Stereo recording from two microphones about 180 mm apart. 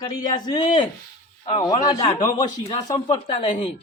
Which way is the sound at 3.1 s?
25° left (ahead or behind).